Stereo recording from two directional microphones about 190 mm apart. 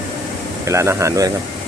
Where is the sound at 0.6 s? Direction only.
15° right (ahead or behind).